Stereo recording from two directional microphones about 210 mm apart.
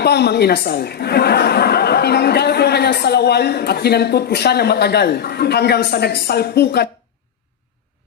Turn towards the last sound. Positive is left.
turn(degrees=50)  # may be behind; listen again after turning